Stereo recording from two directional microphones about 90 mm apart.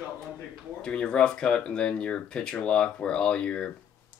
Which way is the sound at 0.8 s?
10° left (ahead or behind).